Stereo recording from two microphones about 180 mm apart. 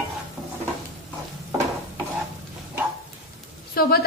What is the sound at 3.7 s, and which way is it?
Speech, 60° left (ahead or behind).